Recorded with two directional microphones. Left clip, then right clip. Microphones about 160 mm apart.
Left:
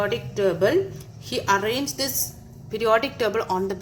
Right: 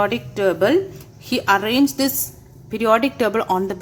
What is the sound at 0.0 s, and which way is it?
A woman's voice, 45° right (ahead or behind).